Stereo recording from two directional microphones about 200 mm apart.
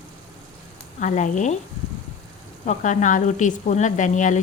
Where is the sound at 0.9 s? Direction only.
40° left (ahead or behind).